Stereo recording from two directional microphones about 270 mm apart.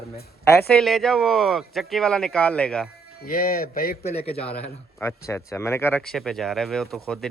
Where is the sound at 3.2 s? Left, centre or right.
Left.